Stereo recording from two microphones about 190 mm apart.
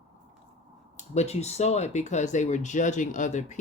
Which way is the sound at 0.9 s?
35° left (ahead or behind).